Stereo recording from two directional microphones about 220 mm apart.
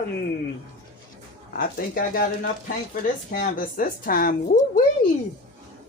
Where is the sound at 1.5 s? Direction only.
40° left (ahead or behind).